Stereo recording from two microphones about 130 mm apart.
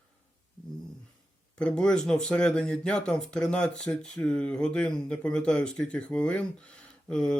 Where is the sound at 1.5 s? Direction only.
5° left (ahead or behind).